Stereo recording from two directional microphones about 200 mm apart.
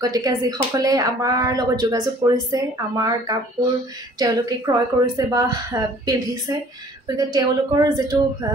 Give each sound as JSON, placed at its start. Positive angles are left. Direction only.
{"t": 0.0, "sound": "a woman's voice", "side_deg": -15}